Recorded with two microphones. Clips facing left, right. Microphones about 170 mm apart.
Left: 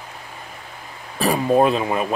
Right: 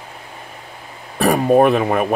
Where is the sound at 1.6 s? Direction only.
65° right (ahead or behind).